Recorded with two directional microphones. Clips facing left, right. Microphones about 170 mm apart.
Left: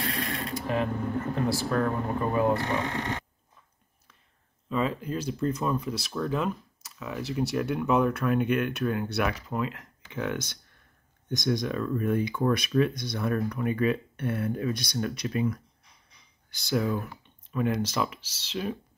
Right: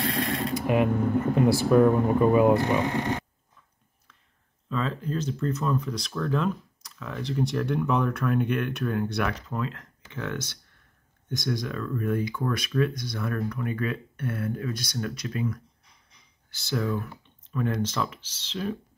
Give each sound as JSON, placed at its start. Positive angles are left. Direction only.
{"t": 0.6, "sound": "mechanisms", "side_deg": -15}
{"t": 1.3, "sound": "speech", "side_deg": -15}
{"t": 4.6, "sound": "speech", "side_deg": 10}